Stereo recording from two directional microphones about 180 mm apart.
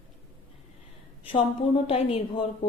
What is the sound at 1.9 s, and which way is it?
Speech, 35° left (ahead or behind).